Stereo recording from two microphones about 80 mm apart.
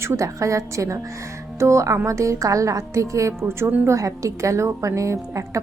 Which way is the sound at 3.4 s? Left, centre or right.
Right.